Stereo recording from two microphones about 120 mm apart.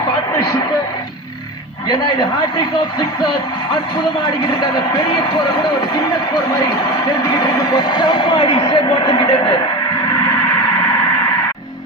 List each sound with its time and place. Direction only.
7.7 s a man's voice: 40° left (ahead or behind)